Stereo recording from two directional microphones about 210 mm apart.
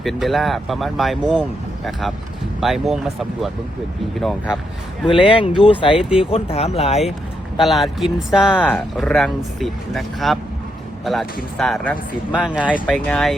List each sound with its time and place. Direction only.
0.0 s speech: centre (ahead or behind)
5.0 s speech: 25° left (ahead or behind)
7.6 s speech: centre (ahead or behind)
12.5 s speech: 5° right (ahead or behind)